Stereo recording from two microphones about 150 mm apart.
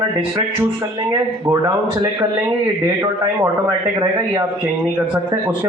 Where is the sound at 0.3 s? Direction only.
25° right (ahead or behind).